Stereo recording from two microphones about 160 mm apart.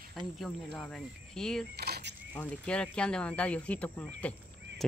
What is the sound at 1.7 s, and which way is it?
Coin, 90° right.